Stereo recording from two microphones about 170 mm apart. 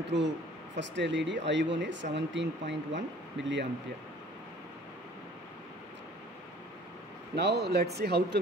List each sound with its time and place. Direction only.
0.0 s speech: 90° right
7.3 s speech: 75° right (ahead or behind)